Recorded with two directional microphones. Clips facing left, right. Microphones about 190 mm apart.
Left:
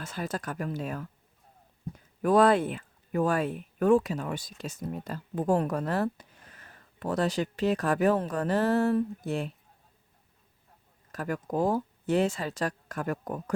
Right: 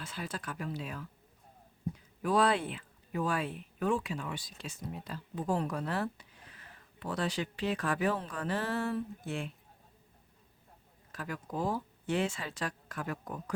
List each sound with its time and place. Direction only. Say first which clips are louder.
0.0 s speech: left 6 dB; 45° left (ahead or behind)
2.2 s speech: left 7 dB; 50° left (ahead or behind)
11.1 s speech: left 8 dB; 50° left (ahead or behind)